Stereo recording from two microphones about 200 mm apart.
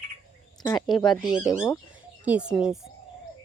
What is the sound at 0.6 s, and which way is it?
Speech, 20° left (ahead or behind).